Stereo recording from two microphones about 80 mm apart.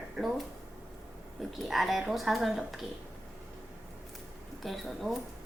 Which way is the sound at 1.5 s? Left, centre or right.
Centre.